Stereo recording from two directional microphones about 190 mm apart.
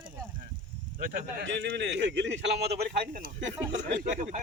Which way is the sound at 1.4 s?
70° right (ahead or behind).